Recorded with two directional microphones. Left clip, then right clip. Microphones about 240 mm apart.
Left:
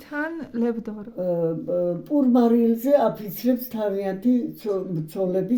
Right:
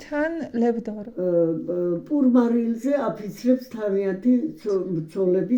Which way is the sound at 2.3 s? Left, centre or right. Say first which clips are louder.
Left 5 dB; left.